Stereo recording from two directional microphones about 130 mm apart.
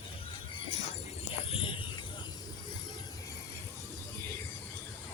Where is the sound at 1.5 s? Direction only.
45° left (ahead or behind).